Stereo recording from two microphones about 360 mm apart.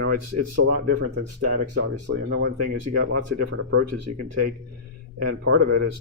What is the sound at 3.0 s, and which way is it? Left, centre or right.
Speech, right.